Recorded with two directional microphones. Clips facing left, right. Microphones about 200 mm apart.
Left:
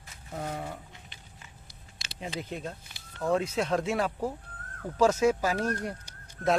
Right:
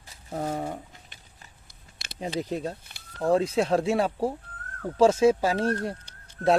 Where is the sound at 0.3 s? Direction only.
35° right (ahead or behind).